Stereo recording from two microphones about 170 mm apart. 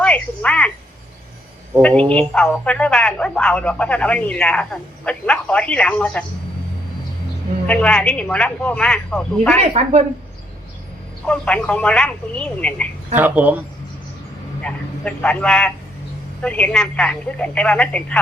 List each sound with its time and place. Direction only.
0.0 s a sound: 5° left (ahead or behind)
1.8 s speech: 5° left (ahead or behind)
7.7 s speech: 5° left (ahead or behind)
9.8 s speech: 40° right (ahead or behind)
11.3 s speech: 5° left (ahead or behind)
13.1 s speech: 10° right (ahead or behind)
14.6 s a man's voice: 5° left (ahead or behind)